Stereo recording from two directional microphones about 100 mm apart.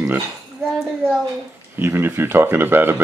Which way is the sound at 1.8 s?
25° right (ahead or behind).